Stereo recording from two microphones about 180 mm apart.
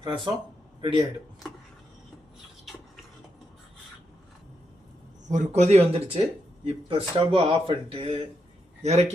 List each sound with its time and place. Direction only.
0.0 s speech: 25° right (ahead or behind)
5.3 s speech: 40° right (ahead or behind)